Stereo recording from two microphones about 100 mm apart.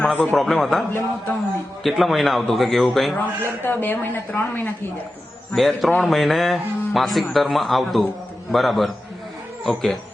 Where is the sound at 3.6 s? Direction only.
20° left (ahead or behind).